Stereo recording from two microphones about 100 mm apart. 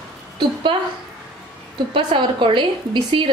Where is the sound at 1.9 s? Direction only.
55° right (ahead or behind).